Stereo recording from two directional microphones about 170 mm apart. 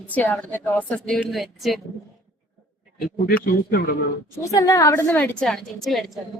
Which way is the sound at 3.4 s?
65° left (ahead or behind).